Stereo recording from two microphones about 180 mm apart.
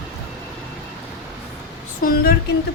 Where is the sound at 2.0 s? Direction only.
55° left (ahead or behind).